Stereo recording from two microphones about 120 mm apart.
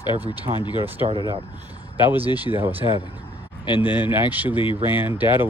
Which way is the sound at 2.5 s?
65° left (ahead or behind).